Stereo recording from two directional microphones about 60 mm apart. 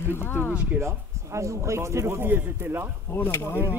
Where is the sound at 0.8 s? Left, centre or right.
Right.